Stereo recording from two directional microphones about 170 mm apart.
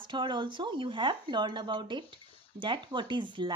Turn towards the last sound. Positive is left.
turn(degrees=-30)  # may be behind; listen again after turning